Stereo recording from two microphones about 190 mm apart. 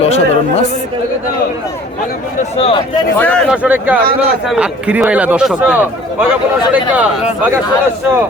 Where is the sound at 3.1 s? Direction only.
10° left (ahead or behind).